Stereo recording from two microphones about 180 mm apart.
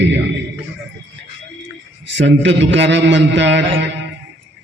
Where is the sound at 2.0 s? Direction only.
85° right.